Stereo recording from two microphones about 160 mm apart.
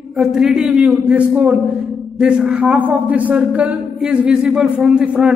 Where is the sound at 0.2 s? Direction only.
5° right (ahead or behind).